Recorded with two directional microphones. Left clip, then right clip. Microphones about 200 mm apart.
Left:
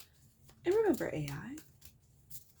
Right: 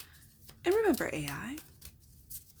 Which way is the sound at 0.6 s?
30° right (ahead or behind).